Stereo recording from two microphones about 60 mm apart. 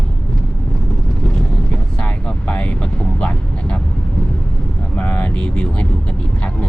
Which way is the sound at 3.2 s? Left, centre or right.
Left.